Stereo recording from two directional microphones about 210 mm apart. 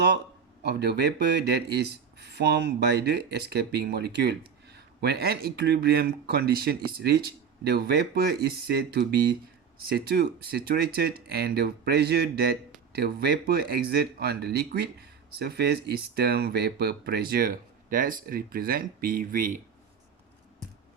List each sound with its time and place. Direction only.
0.6 s speech: 50° right (ahead or behind)